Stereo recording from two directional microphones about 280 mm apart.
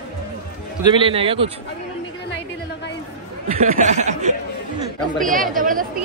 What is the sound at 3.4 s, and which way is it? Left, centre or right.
Speech, right.